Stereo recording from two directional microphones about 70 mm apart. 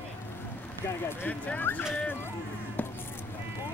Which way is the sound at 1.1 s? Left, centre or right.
Left.